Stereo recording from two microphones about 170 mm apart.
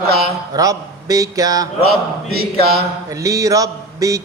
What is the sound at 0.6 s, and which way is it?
Mantra, 20° right (ahead or behind).